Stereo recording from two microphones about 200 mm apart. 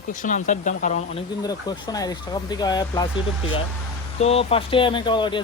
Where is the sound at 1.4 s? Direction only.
20° left (ahead or behind).